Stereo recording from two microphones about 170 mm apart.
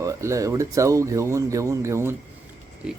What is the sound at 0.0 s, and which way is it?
Speech, 20° right (ahead or behind).